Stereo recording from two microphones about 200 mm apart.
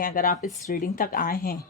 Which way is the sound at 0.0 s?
45° left (ahead or behind).